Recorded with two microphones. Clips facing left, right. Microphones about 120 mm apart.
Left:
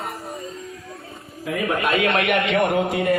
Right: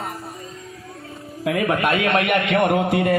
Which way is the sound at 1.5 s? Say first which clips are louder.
Right 2 dB; 65° right (ahead or behind).